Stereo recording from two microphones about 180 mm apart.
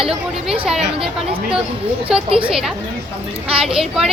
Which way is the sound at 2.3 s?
30° right (ahead or behind).